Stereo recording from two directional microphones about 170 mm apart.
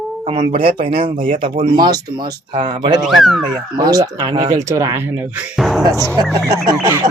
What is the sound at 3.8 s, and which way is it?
Speech, 25° right (ahead or behind).